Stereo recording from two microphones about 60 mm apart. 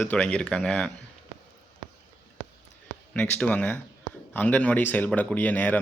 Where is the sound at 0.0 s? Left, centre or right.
Left.